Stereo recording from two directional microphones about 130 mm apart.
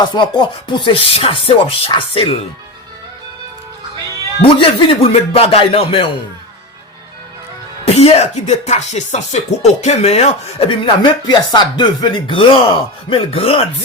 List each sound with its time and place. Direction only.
0.0 s speech: 35° left (ahead or behind)
4.4 s speech: 45° left (ahead or behind)
7.9 s music: 50° left (ahead or behind)
10.7 s speech: 40° left (ahead or behind)